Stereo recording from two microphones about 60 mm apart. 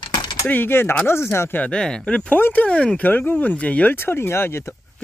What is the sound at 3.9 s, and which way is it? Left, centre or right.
Speech, left.